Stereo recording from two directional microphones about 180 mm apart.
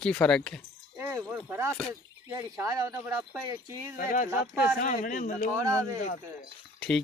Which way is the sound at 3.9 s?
50° left (ahead or behind).